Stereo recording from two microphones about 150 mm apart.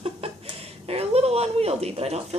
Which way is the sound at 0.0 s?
40° right (ahead or behind).